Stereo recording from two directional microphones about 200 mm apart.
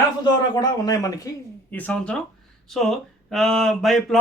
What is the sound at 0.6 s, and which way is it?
Speech, 20° left (ahead or behind).